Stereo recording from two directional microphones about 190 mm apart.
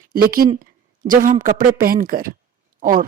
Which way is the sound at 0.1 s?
50° right (ahead or behind).